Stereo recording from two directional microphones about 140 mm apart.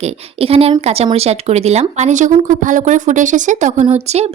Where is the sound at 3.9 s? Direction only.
50° right (ahead or behind).